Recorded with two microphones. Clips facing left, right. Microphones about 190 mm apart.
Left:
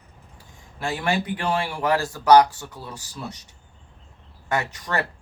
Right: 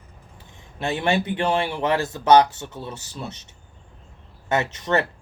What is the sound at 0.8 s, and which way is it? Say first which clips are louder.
Speech: right 2 dB; 25° right (ahead or behind).